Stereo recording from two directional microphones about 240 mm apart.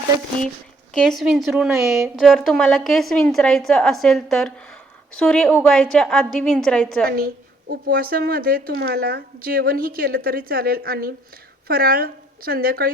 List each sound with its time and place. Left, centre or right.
0.9 s a woman's voice: centre
7.7 s a woman's voice: right